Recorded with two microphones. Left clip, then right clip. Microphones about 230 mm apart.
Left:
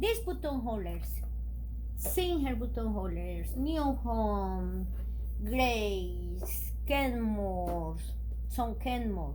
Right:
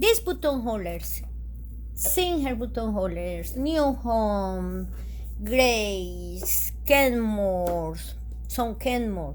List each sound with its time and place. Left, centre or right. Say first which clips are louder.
0.0 s a woman's voice: right 10 dB; right